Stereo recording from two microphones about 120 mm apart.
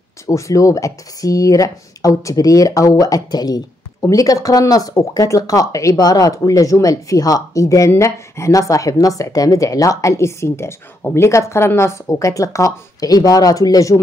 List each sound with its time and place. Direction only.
0.3 s speech: 25° left (ahead or behind)